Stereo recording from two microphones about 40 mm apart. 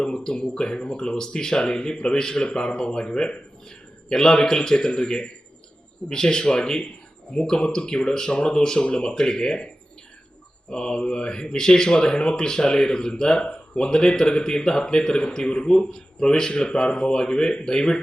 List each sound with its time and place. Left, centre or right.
0.0 s speech: left
10.7 s speech: left
15.9 s speech: centre